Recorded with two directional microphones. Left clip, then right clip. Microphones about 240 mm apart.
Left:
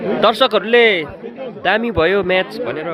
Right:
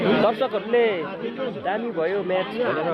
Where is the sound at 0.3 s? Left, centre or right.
Left.